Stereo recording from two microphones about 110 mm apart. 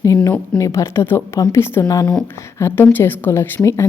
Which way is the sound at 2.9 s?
20° left (ahead or behind).